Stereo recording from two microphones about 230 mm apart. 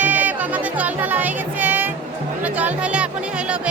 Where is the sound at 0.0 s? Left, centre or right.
Centre.